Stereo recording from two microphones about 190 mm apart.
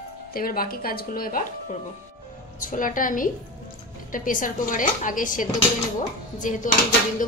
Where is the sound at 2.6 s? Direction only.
45° left (ahead or behind).